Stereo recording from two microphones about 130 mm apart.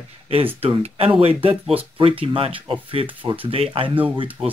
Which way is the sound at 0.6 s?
50° right (ahead or behind).